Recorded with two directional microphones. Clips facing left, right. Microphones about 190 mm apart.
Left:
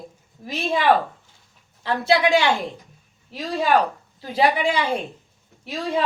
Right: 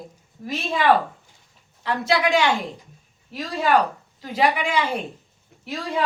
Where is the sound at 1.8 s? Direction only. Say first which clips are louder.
Left 2 dB; 30° left (ahead or behind).